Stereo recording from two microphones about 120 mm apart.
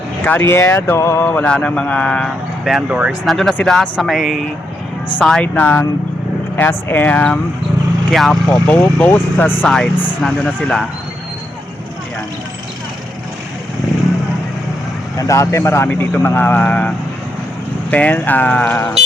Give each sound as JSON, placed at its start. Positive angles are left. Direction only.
{"t": 0.3, "sound": "speech", "side_deg": 20}
{"t": 9.6, "sound": "speech", "side_deg": 5}
{"t": 15.2, "sound": "speech", "side_deg": 25}
{"t": 17.9, "sound": "speech", "side_deg": 10}